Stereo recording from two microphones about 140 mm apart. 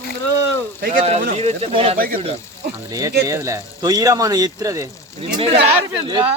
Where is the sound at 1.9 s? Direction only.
90° right.